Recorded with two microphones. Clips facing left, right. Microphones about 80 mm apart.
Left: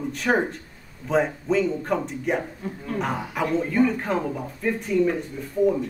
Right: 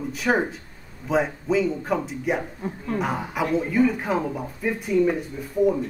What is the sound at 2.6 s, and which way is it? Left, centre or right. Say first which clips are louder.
Speech: right 2 dB; right.